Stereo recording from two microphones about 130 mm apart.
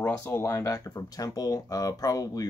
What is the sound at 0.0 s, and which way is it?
Speech, 20° left (ahead or behind).